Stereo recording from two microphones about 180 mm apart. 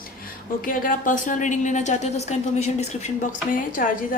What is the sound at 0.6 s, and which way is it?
A woman's voice, 50° left (ahead or behind).